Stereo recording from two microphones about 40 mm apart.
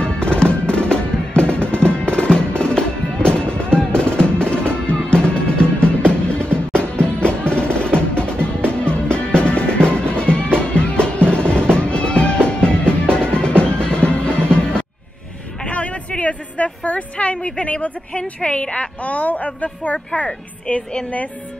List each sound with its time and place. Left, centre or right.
0.0 s music: left
15.6 s a sound: left
20.2 s a woman's voice: left